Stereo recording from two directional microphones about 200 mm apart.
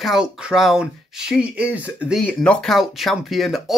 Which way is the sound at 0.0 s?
Centre (ahead or behind).